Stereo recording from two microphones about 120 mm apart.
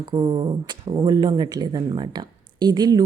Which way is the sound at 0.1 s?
40° right (ahead or behind).